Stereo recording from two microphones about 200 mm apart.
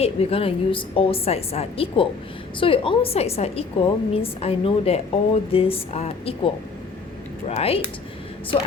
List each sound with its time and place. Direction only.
0.0 s a woman's voice: 30° left (ahead or behind)